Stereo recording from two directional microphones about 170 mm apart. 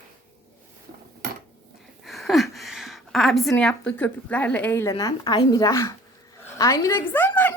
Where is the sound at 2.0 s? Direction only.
Centre (ahead or behind); by 7.0 s 20° left (ahead or behind).